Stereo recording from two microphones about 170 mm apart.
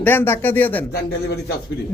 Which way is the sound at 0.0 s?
10° left (ahead or behind).